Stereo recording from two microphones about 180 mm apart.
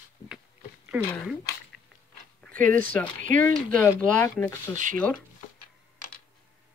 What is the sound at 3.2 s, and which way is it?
Speech, 45° right (ahead or behind).